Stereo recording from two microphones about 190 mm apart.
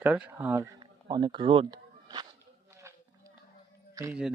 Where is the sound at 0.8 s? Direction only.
25° right (ahead or behind).